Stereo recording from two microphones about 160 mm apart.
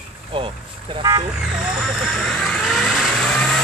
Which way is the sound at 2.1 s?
Centre (ahead or behind).